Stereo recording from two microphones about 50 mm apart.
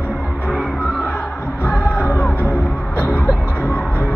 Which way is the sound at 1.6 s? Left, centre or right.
Left.